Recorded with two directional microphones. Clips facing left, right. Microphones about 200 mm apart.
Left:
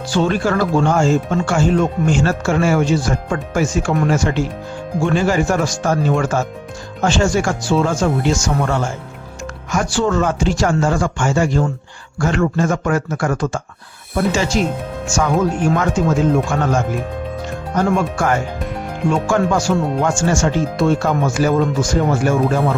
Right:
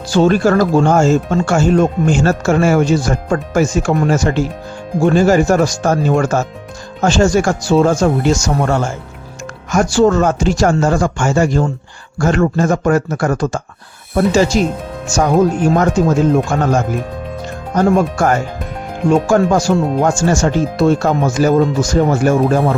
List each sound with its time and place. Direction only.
0.1 s speech: 40° right (ahead or behind)